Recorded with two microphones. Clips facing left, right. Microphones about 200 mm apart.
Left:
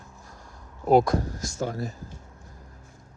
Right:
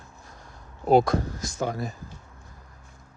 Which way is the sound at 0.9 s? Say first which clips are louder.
Even; 25° right (ahead or behind).